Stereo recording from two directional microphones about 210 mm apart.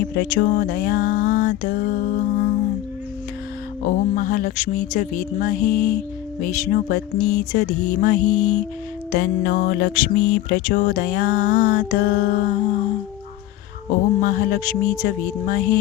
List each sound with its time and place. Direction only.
0.0 s music: 45° left (ahead or behind)
3.8 s music: 40° left (ahead or behind)
14.2 s music: 40° left (ahead or behind)